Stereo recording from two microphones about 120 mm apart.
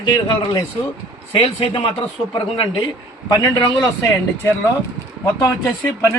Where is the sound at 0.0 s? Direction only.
40° left (ahead or behind).